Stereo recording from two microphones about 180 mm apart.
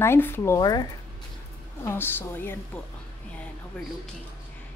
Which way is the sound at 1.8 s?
10° left (ahead or behind).